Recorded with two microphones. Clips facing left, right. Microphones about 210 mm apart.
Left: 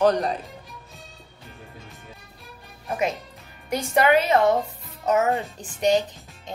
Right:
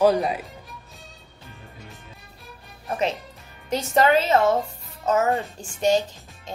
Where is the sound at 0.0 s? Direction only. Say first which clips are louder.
Right 1 dB; 5° right (ahead or behind).